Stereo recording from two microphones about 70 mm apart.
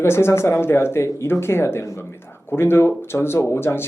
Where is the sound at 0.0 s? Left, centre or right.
Left.